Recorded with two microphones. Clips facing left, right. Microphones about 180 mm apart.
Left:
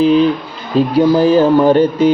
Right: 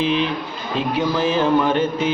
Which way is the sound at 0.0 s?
40° left (ahead or behind).